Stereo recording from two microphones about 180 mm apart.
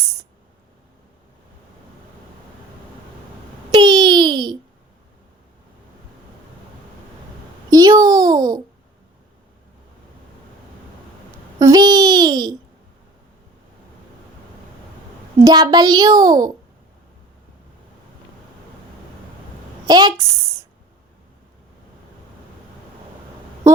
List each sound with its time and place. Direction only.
3.7 s babbling: 25° right (ahead or behind)
7.7 s a sound: 20° right (ahead or behind)
11.6 s babbling: 20° right (ahead or behind)
15.4 s a child's voice: 20° right (ahead or behind)
19.9 s a woman's voice: 20° right (ahead or behind)